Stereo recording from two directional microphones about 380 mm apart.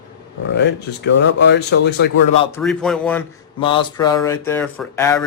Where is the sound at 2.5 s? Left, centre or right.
Centre.